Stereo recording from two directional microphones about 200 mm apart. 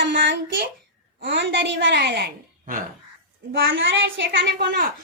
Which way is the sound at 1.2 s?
65° right (ahead or behind).